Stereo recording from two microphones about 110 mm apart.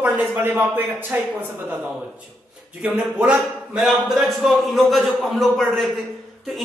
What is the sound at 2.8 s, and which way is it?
A man's voice, 10° right (ahead or behind).